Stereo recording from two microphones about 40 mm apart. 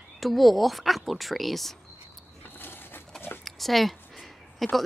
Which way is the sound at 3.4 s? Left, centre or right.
Centre.